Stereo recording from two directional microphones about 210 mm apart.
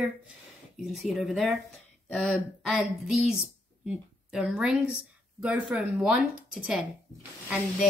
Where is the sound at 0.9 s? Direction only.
Centre (ahead or behind).